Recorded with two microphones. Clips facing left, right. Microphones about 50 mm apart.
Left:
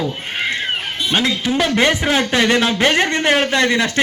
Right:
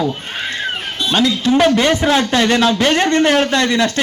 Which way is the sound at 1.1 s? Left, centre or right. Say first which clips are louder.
Right 4 dB; centre.